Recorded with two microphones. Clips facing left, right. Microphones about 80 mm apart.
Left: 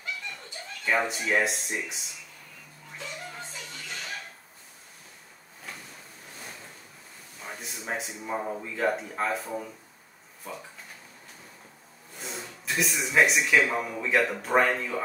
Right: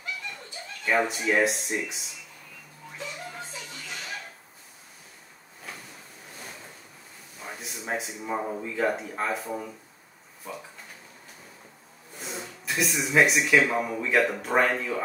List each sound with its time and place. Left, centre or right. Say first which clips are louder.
0.8 s speech: right 2 dB; centre
3.0 s music: right 2 dB; centre
7.3 s speech: right 1 dB; centre
12.2 s speech: right 1 dB; centre